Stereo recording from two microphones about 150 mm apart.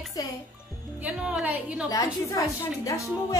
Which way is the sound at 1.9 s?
20° left (ahead or behind).